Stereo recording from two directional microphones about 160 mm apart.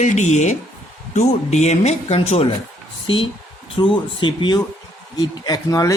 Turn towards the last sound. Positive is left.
turn(degrees=20)  # may be behind; listen again after turning